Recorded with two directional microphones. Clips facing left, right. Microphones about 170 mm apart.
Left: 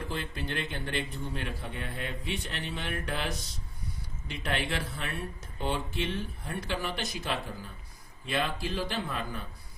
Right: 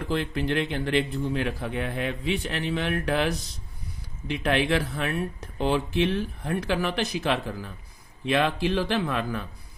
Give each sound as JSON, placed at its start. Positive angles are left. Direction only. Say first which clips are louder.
{"t": 0.5, "sound": "speech", "louder": "right 9 dB", "side_deg": -75}
{"t": 4.4, "sound": "speech", "louder": "right 8 dB", "side_deg": -70}